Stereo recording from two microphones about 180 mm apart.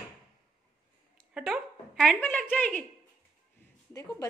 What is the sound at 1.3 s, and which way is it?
A woman's voice, 5° right (ahead or behind).